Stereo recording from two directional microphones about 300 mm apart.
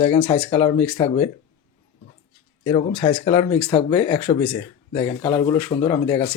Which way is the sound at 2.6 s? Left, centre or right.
Centre.